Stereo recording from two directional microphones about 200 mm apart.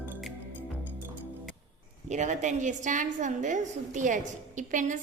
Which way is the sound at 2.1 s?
35° right (ahead or behind).